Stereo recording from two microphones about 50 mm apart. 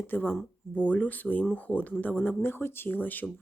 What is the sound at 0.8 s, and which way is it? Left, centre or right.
Speech, left.